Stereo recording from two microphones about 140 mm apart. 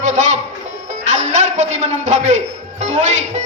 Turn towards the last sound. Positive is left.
turn(degrees=-60)  # may be behind; listen again after turning